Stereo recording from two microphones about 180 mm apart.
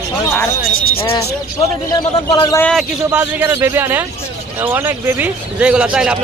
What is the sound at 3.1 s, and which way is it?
Speech, 10° right (ahead or behind).